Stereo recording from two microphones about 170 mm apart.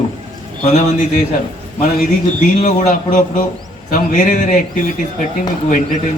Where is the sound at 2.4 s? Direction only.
45° left (ahead or behind).